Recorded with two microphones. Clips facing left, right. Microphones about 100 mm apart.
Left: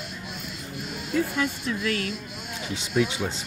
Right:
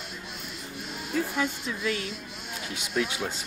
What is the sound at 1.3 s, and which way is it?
Speech, 15° right (ahead or behind).